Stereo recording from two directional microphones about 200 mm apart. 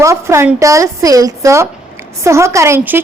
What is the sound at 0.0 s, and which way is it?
A woman's voice, 15° right (ahead or behind).